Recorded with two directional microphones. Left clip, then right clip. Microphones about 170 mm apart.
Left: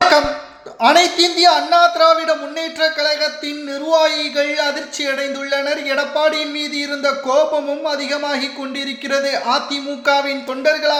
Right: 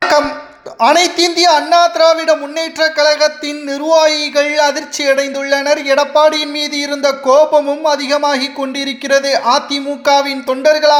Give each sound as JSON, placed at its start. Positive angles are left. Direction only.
{"t": 0.8, "sound": "a man's voice", "side_deg": -40}